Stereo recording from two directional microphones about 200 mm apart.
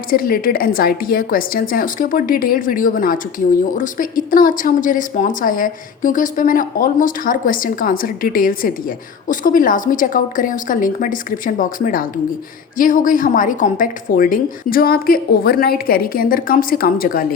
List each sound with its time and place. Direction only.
0.1 s speech: 45° left (ahead or behind)